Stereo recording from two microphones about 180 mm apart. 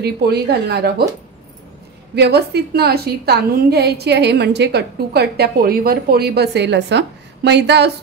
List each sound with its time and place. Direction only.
0.0 s a woman's voice: 65° right (ahead or behind)
2.1 s a woman's voice: 65° right (ahead or behind)